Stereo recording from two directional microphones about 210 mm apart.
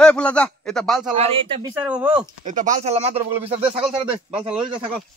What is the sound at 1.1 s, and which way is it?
Speech, 30° right (ahead or behind).